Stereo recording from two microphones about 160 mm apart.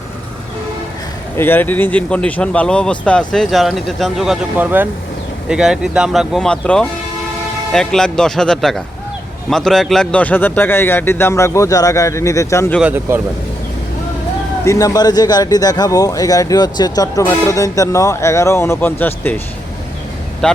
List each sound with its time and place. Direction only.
1.4 s a man's voice: 10° left (ahead or behind)
12.8 s speech: 10° right (ahead or behind)
14.6 s speech: 20° left (ahead or behind)
20.4 s speech: 5° left (ahead or behind)